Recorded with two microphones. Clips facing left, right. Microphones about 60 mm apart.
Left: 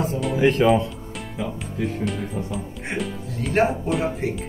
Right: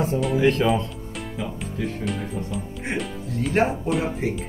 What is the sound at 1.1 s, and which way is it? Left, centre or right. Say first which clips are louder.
Music: right 1 dB; centre.